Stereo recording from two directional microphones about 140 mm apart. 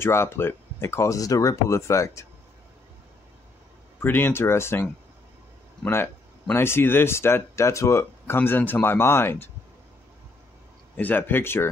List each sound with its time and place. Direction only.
0.0 s speech: 20° left (ahead or behind)
4.0 s speech: 15° left (ahead or behind)
6.5 s speech: 15° left (ahead or behind)
11.0 s speech: 15° left (ahead or behind)